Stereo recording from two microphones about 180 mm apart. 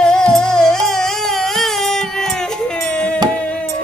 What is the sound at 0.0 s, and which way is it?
Music, 5° left (ahead or behind).